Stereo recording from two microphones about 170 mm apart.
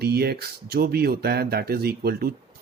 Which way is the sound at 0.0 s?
70° right (ahead or behind).